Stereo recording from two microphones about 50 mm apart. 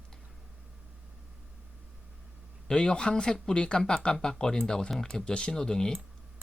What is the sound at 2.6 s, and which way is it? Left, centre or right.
Speech, centre.